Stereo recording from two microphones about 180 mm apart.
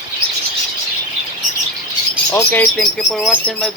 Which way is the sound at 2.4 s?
5° left (ahead or behind).